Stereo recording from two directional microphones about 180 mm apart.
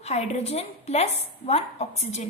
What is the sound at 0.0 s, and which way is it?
A woman's voice, 35° left (ahead or behind).